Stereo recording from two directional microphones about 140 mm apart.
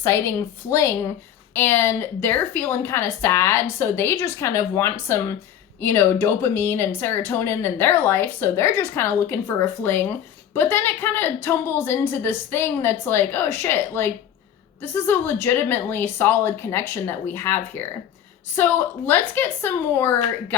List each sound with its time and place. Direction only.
0.0 s a woman's voice: 20° left (ahead or behind)